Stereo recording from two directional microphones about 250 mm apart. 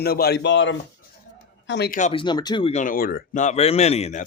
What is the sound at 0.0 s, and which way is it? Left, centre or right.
Speech, left.